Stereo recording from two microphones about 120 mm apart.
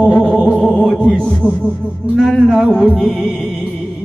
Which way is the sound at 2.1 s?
Centre (ahead or behind).